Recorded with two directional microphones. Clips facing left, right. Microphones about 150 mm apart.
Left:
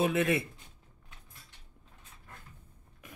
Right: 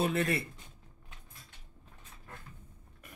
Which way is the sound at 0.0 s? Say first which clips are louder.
Left 2 dB; 5° left (ahead or behind).